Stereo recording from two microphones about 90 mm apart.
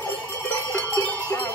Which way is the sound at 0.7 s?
20° left (ahead or behind).